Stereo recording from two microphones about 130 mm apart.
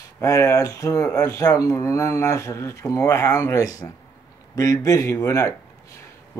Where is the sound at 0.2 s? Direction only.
20° left (ahead or behind).